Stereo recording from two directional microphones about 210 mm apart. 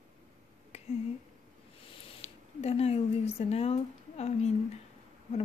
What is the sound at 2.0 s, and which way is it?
A woman's voice, 30° left (ahead or behind).